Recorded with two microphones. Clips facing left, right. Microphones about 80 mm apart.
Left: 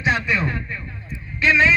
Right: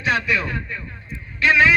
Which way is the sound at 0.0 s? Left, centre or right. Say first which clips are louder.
Even; left.